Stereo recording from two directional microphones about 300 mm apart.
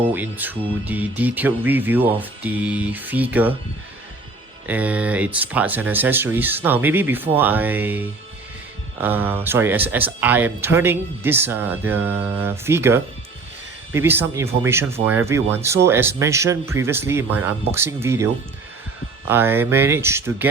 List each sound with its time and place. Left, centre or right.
0.0 s speech: centre
4.6 s speech: centre
19.3 s speech: centre